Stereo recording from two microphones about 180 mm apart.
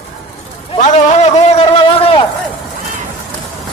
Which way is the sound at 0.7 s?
40° left (ahead or behind).